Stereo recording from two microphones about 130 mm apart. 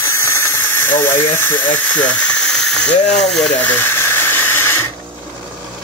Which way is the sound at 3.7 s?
15° left (ahead or behind).